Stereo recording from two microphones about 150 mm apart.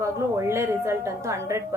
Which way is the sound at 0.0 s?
20° right (ahead or behind).